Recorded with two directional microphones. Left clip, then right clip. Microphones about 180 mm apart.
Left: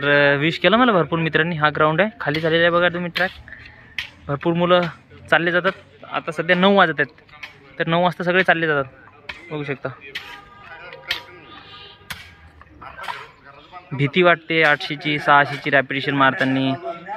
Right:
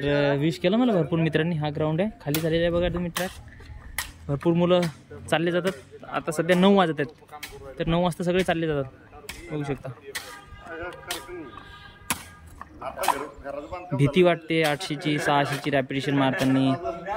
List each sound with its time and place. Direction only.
0.0 s speech: 5° right (ahead or behind)
4.0 s finger snapping: 35° right (ahead or behind)
4.3 s speech: 10° right (ahead or behind)
10.1 s music: 25° right (ahead or behind)
10.9 s music: 50° right (ahead or behind)
13.9 s speech: 10° right (ahead or behind)